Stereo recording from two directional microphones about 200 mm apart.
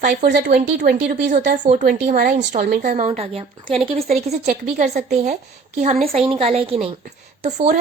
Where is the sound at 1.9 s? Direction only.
50° right (ahead or behind).